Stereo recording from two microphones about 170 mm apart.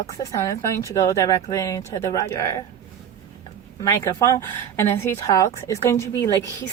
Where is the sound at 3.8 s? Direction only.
20° left (ahead or behind).